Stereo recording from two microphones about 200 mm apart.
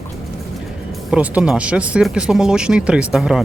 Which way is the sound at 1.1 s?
5° right (ahead or behind).